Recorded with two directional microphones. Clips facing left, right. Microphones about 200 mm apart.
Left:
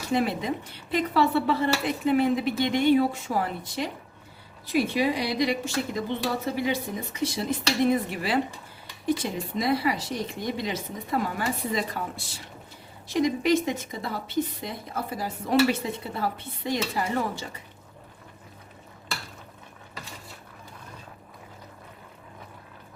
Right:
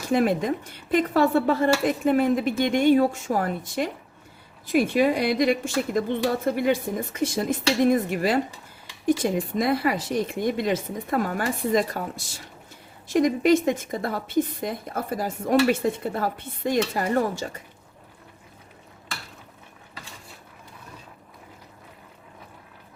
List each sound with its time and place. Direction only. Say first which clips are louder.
0.1 s a woman's voice: right 4 dB; 50° right (ahead or behind)